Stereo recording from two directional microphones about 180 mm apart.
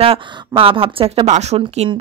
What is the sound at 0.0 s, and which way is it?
Speech, 30° right (ahead or behind).